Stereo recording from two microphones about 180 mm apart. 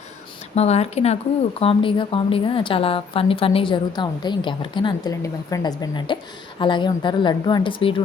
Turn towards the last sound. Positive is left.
turn(degrees=30)  # may be behind; listen again after turning